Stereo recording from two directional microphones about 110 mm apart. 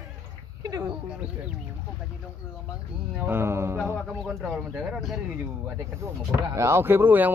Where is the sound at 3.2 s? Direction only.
20° right (ahead or behind).